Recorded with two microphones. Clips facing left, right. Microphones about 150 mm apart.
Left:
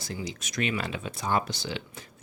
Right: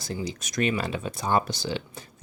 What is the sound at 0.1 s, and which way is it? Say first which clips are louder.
Speech: right 4 dB; 40° right (ahead or behind).